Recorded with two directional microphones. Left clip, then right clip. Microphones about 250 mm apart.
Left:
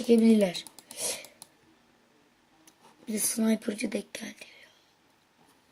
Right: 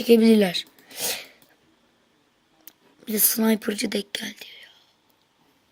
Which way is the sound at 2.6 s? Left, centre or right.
Right.